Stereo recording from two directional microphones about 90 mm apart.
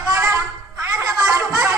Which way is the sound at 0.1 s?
35° right (ahead or behind).